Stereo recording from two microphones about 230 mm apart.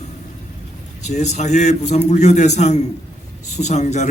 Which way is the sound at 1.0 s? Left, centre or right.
Left.